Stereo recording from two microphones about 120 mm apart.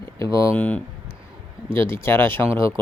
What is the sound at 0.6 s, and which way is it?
Speech, 10° left (ahead or behind).